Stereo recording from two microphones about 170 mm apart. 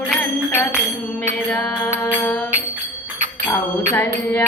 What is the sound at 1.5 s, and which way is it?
Mantra, 10° left (ahead or behind).